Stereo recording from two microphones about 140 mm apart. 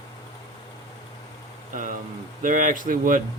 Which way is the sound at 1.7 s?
70° right (ahead or behind).